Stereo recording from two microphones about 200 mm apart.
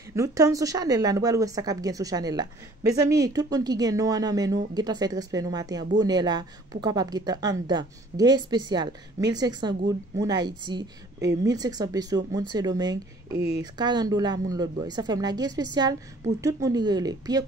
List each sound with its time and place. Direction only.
0.1 s speech: 15° right (ahead or behind)